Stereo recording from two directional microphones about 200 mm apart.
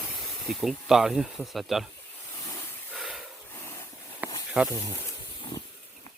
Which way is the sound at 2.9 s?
Centre (ahead or behind).